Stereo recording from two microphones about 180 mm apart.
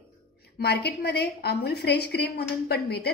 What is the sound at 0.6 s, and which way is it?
A woman's voice, 65° left (ahead or behind).